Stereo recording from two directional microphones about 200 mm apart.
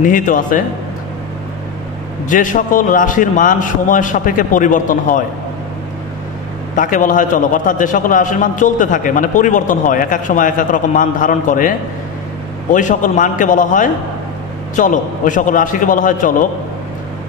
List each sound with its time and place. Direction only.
0.0 s a man's voice: 40° left (ahead or behind)
2.2 s a man's voice: 40° left (ahead or behind)
6.7 s a man's voice: 40° left (ahead or behind)
12.7 s a man's voice: 40° left (ahead or behind)